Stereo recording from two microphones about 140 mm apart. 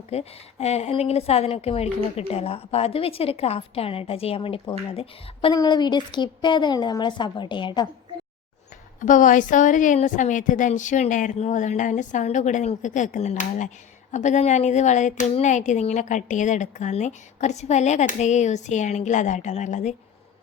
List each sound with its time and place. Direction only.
0.1 s a woman's voice: 50° left (ahead or behind)
5.5 s a woman's voice: 30° left (ahead or behind)
9.0 s a woman's voice: 65° left (ahead or behind)